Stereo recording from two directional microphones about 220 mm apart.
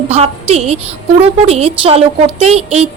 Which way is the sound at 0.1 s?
30° right (ahead or behind).